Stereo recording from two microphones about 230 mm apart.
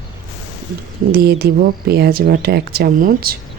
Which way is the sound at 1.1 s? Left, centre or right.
Right.